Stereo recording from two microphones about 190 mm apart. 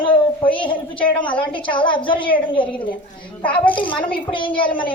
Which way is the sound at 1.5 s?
25° left (ahead or behind).